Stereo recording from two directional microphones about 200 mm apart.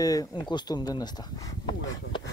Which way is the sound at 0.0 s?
20° left (ahead or behind).